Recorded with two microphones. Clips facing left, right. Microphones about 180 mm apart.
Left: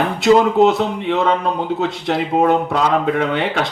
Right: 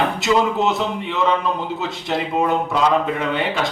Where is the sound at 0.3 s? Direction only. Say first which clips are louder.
Left 8 dB; 55° left (ahead or behind).